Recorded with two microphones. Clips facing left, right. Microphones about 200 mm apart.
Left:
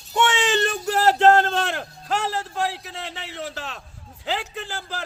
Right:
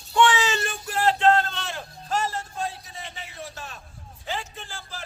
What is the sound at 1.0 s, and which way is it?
A man's voice, 40° left (ahead or behind).